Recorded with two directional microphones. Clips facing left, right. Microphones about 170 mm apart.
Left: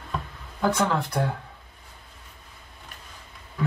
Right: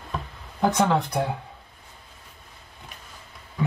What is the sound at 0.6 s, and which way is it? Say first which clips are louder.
Speech: right 2 dB; 20° right (ahead or behind).